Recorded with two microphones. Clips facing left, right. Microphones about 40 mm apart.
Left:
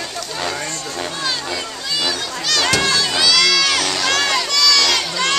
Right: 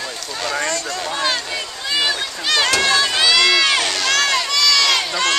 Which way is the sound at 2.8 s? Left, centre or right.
Centre.